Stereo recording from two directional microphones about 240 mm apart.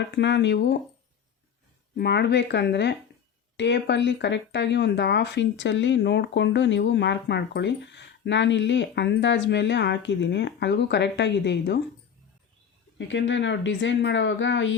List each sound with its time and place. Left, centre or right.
0.1 s speech: left
2.0 s speech: left
13.0 s speech: left